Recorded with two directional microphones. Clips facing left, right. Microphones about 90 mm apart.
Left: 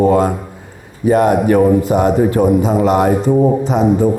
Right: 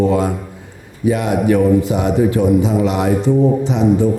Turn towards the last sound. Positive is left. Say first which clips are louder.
# left 2 dB
turn(degrees=45)  # may be behind; listen again after turning